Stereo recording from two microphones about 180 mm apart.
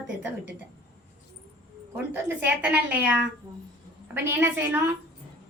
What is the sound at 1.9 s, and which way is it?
A woman's voice, 10° right (ahead or behind).